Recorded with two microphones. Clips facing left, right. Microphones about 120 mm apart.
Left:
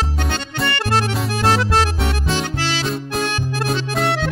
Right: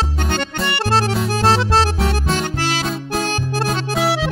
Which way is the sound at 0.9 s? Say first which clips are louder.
Right 4 dB; 30° right (ahead or behind).